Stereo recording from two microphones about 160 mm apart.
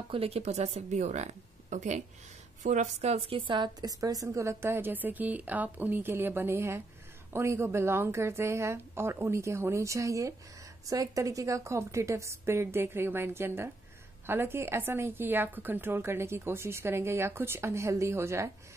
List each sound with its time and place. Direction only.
0.1 s a woman's voice: 40° right (ahead or behind); by 18.5 s 15° right (ahead or behind)